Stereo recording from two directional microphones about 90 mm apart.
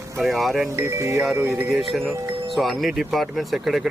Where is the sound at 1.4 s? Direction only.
20° right (ahead or behind).